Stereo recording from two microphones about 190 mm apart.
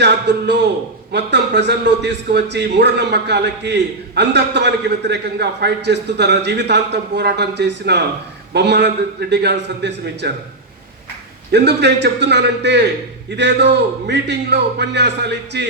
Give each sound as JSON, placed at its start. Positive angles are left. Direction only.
{"t": 0.0, "sound": "a man's voice", "side_deg": -65}
{"t": 11.5, "sound": "a man's voice", "side_deg": -65}